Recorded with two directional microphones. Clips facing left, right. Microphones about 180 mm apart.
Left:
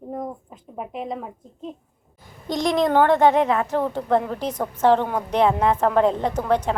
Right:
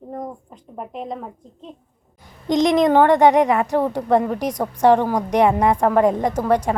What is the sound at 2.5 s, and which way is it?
A woman's voice, 20° right (ahead or behind).